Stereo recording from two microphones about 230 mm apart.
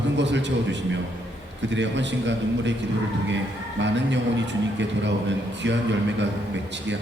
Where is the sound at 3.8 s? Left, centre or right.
Right.